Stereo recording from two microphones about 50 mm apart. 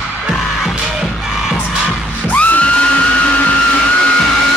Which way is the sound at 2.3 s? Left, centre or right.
Left.